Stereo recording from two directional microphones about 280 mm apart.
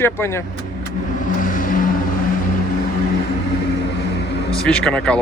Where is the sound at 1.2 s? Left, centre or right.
Left.